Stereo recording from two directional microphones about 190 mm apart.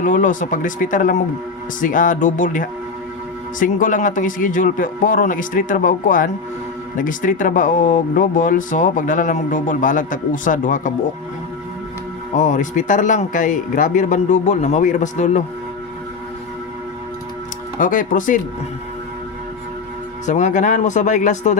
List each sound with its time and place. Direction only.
0.0 s speech: 40° left (ahead or behind)
12.3 s speech: 40° left (ahead or behind)
17.7 s speech: 45° left (ahead or behind)
20.2 s speech: 40° left (ahead or behind)